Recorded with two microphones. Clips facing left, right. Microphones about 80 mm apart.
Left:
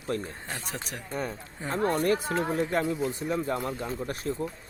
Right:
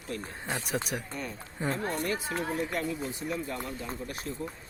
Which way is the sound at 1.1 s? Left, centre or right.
Left.